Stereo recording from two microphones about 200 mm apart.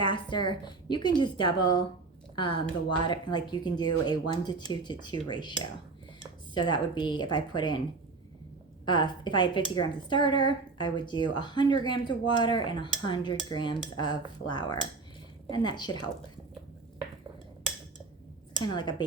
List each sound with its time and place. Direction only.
0.0 s a woman's voice: 25° left (ahead or behind)
8.9 s speech: 20° left (ahead or behind)
18.6 s speech: 20° left (ahead or behind)